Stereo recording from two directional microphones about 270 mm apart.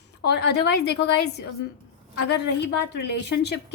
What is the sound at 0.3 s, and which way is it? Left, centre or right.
Speech, left.